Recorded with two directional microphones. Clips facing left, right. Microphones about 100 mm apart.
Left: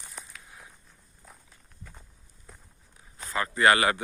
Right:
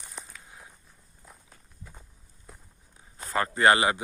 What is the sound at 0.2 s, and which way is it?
Walk, centre (ahead or behind).